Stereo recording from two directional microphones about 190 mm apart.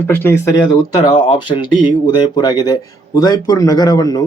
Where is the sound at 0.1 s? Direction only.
10° left (ahead or behind).